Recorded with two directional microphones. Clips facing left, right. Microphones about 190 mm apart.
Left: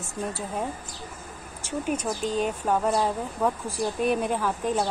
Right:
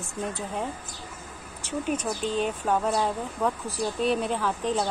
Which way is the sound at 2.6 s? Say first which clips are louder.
Left 2 dB; 5° left (ahead or behind).